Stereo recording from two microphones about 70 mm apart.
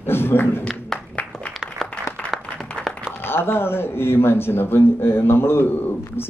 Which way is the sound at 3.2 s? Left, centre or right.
Left.